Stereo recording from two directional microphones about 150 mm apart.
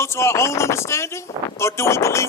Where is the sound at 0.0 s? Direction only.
20° left (ahead or behind).